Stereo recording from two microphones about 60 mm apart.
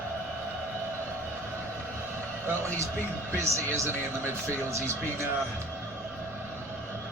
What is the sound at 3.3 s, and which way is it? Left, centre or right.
Speech, right.